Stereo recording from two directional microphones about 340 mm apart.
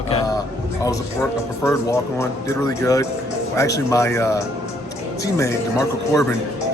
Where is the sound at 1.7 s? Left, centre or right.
Centre.